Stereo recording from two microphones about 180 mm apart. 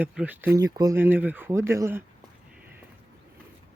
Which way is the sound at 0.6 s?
20° right (ahead or behind).